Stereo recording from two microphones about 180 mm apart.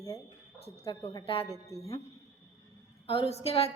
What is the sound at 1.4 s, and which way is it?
Speech, 20° right (ahead or behind).